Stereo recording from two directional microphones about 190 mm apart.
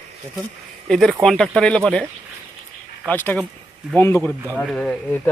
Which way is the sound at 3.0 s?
10° left (ahead or behind).